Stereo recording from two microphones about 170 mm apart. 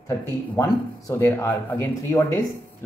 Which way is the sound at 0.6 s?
20° left (ahead or behind).